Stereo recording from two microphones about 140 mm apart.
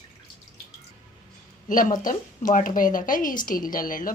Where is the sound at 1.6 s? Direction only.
70° left (ahead or behind).